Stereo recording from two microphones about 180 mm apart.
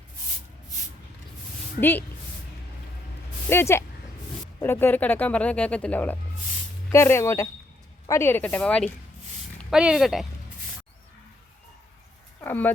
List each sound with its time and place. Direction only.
1.8 s speech: 10° left (ahead or behind)
3.5 s speech: 15° left (ahead or behind); by 10.2 s centre (ahead or behind)
12.4 s a sound: 10° left (ahead or behind)